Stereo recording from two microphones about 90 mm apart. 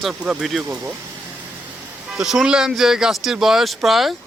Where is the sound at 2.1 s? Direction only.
5° right (ahead or behind).